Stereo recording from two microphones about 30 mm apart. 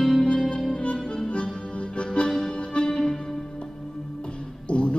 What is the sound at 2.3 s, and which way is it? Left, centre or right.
Music, centre.